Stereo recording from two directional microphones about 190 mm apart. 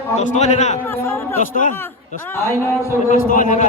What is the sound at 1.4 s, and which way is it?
Speech, 45° left (ahead or behind).